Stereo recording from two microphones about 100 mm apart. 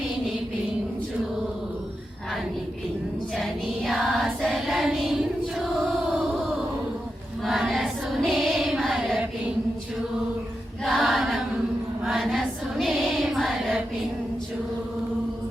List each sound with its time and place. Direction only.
3.3 s child singing: 5° left (ahead or behind)
7.4 s choir: centre (ahead or behind)
10.8 s choir: centre (ahead or behind)
12.0 s female singing: centre (ahead or behind)